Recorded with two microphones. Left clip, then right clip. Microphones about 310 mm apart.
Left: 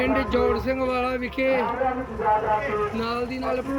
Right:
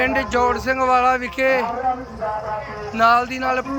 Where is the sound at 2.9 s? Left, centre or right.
Centre.